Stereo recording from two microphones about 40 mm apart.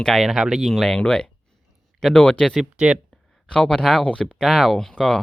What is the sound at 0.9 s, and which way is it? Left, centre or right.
Speech, centre.